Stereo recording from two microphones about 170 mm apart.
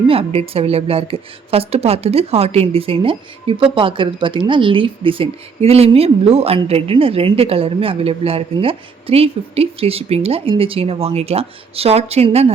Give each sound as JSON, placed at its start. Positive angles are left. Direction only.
{"t": 0.1, "sound": "a woman's voice", "side_deg": -35}